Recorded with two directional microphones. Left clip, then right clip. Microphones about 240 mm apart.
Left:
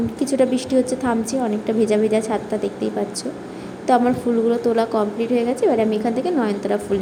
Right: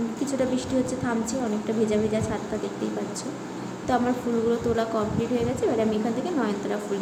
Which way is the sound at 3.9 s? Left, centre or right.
Left.